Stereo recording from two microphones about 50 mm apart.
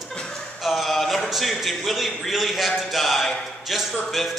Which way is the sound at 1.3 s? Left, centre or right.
Centre.